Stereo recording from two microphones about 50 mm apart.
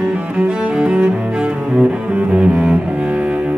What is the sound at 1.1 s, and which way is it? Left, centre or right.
Cello, right.